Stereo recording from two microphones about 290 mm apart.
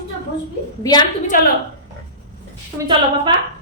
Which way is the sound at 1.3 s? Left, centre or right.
Left.